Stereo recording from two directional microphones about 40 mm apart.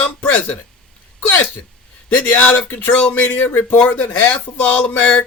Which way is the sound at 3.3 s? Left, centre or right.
Left.